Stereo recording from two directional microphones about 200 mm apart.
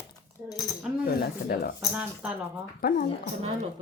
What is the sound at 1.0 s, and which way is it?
Speech, 50° left (ahead or behind).